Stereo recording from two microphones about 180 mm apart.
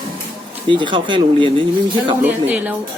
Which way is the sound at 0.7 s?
25° right (ahead or behind).